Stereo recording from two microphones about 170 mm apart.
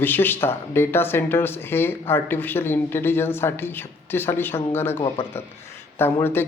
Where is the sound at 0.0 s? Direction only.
10° left (ahead or behind).